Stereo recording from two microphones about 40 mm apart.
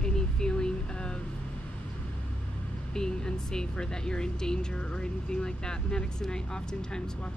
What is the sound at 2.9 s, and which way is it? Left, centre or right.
Speech, centre.